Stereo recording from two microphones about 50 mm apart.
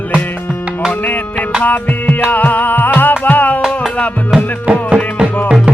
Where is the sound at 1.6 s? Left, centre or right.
Left.